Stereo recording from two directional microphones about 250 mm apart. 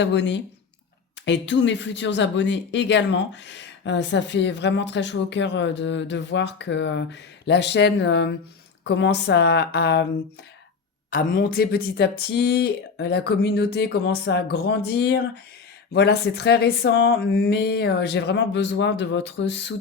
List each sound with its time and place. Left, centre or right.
0.0 s speech: left
11.1 s speech: left